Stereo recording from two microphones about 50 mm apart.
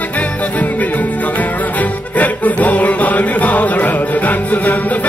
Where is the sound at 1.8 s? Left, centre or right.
Left.